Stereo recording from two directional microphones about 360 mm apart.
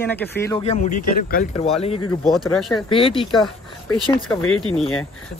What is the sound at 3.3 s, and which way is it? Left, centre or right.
Speech, centre.